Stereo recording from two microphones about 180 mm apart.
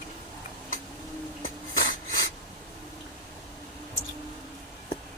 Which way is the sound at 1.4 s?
50° left (ahead or behind).